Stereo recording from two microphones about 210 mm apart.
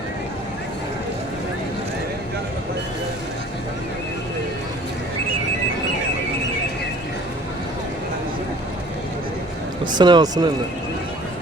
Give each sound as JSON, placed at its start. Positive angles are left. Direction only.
{"t": 10.0, "sound": "speech", "side_deg": -20}